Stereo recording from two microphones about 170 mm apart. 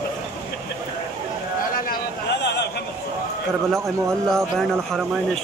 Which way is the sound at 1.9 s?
80° left.